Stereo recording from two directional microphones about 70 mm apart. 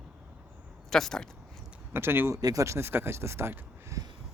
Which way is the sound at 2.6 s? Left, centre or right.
Right.